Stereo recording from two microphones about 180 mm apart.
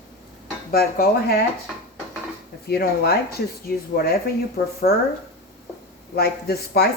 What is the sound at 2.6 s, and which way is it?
Speech, 60° left (ahead or behind).